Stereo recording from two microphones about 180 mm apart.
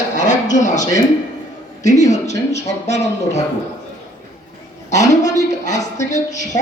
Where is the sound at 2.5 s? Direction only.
40° left (ahead or behind).